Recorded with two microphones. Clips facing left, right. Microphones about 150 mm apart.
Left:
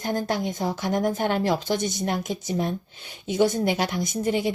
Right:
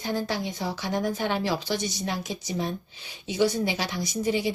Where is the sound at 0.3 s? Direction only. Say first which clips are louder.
Left 4 dB; 50° left (ahead or behind).